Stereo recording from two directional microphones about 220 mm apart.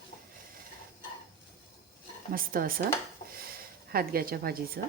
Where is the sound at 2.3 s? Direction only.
40° right (ahead or behind).